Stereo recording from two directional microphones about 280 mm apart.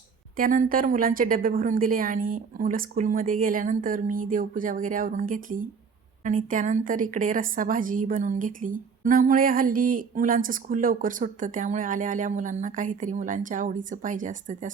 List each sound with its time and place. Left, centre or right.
0.3 s a woman's voice: right